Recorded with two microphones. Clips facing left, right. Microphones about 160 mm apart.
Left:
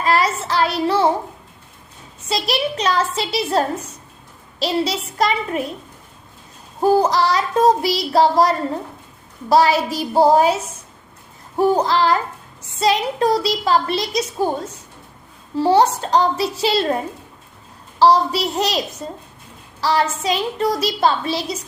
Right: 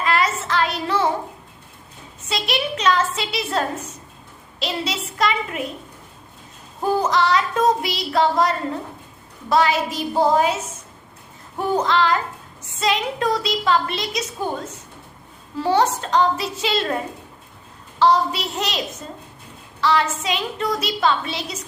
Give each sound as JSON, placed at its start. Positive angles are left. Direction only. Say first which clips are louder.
{"t": 0.0, "sound": "child singing", "louder": "left 3 dB", "side_deg": 35}
{"t": 2.3, "sound": "a woman's voice", "louder": "left 3 dB", "side_deg": 35}
{"t": 6.8, "sound": "a woman's voice", "louder": "left 4 dB", "side_deg": 35}
{"t": 11.5, "sound": "a woman's voice", "louder": "left 4 dB", "side_deg": 35}
{"t": 15.5, "sound": "a woman's voice", "louder": "left 4 dB", "side_deg": 30}
{"t": 18.0, "sound": "a woman's voice", "louder": "left 3 dB", "side_deg": 35}
{"t": 19.8, "sound": "a woman's voice", "louder": "left 1 dB", "side_deg": 35}